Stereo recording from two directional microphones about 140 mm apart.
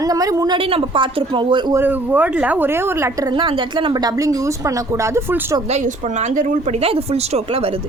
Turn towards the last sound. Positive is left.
turn(degrees=-40)  # may be behind; listen again after turning